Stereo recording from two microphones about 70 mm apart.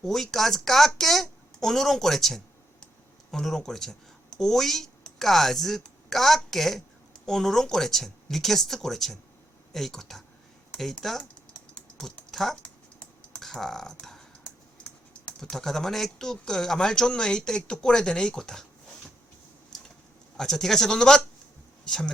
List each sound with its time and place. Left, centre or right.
0.0 s a woman's voice: centre
12.3 s speech: centre
12.6 s typing: centre
13.4 s speech: centre
14.0 s a sound: centre
14.4 s typing: centre
15.4 s speech: centre
20.3 s speech: centre